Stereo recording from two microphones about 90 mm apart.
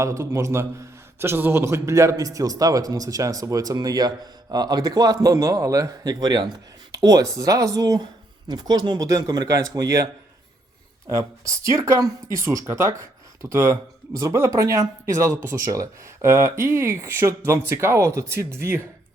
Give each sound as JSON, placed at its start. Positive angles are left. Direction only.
{"t": 0.0, "sound": "speech", "side_deg": -30}
{"t": 11.1, "sound": "speech", "side_deg": -35}